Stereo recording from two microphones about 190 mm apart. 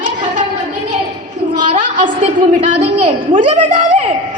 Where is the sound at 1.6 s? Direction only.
40° right (ahead or behind).